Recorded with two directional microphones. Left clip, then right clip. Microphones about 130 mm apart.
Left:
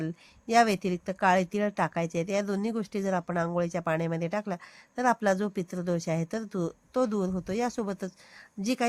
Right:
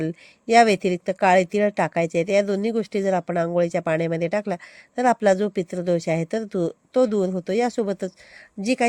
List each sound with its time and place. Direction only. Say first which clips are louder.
0.0 s speech: right 8 dB; 40° right (ahead or behind)